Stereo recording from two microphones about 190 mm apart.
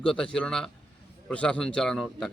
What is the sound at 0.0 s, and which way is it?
A man's voice, 5° left (ahead or behind).